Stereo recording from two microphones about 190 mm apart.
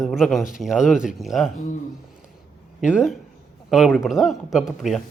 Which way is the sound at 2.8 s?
5° right (ahead or behind).